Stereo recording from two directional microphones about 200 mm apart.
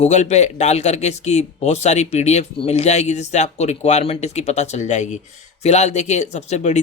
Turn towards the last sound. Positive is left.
turn(degrees=35)  # may be behind; listen again after turning